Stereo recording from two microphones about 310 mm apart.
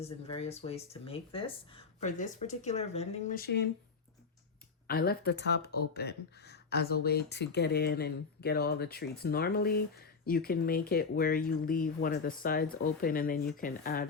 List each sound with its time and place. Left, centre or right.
0.0 s speech: centre
4.9 s speech: left